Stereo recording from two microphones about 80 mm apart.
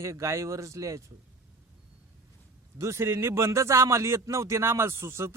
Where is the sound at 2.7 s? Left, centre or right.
Right.